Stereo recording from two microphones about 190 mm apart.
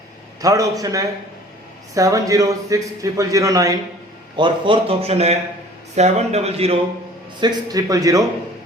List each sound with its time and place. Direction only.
0.4 s a man's voice: 15° right (ahead or behind)